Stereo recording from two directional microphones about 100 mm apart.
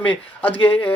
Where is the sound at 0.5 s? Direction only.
65° left (ahead or behind).